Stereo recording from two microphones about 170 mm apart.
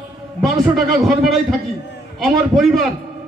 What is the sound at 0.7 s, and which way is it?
A man's voice, centre (ahead or behind).